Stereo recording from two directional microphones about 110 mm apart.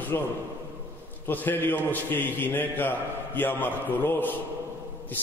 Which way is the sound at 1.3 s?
15° left (ahead or behind).